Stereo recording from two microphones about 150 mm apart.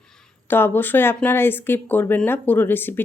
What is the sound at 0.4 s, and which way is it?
A woman's voice, 15° left (ahead or behind).